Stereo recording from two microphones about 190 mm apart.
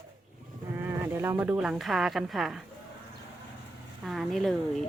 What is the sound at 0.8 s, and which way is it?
Speech, 15° right (ahead or behind).